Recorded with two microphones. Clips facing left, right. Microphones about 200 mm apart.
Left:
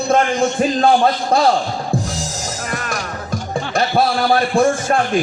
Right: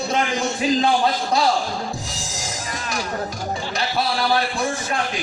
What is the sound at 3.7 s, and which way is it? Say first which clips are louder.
A man's voice: left 8 dB; 55° left (ahead or behind).